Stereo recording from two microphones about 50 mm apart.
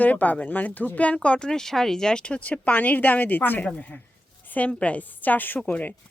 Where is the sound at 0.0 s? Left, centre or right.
Left.